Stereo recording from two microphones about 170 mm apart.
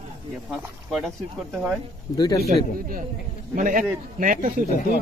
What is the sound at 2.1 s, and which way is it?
Speech, 20° left (ahead or behind).